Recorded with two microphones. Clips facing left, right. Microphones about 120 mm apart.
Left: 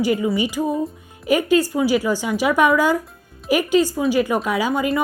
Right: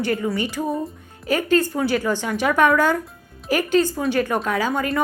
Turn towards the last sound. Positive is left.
turn(degrees=5)  # may be behind; listen again after turning